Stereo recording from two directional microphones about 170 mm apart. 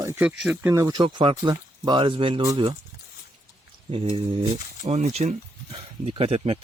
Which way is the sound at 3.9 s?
35° right (ahead or behind).